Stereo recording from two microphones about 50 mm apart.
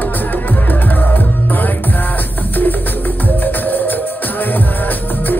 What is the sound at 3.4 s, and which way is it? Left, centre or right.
Music, left.